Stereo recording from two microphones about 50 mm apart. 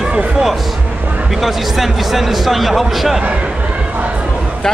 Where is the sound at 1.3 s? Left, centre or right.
Centre.